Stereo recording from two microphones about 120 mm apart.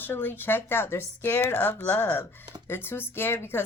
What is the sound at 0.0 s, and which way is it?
A woman's voice, 15° left (ahead or behind).